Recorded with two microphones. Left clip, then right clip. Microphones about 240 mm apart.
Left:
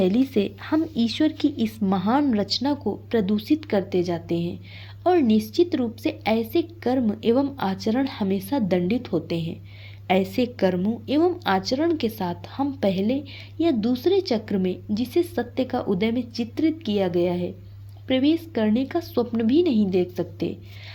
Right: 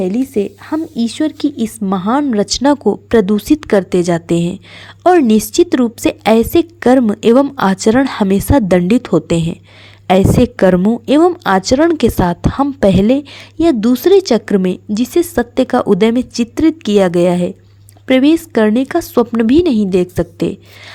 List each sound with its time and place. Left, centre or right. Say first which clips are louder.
0.0 s speech: right 6 dB; centre
2.6 s a woman's voice: right 14 dB; right